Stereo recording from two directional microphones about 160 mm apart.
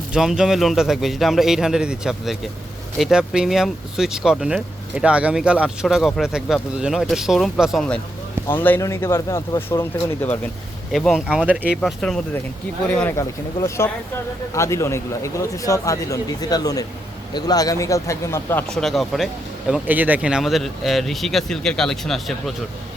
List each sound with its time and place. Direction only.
0.1 s speech: 5° right (ahead or behind); by 10.3 s 10° left (ahead or behind)
10.9 s speech: centre (ahead or behind)
11.8 s speech: 5° left (ahead or behind)
18.7 s speech: centre (ahead or behind)